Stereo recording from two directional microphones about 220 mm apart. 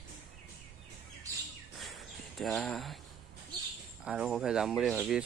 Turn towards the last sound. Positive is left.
turn(degrees=0)  # may be behind; listen again after turning